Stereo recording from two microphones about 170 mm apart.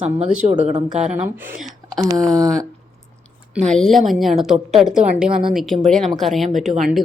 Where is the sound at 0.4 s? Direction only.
45° right (ahead or behind).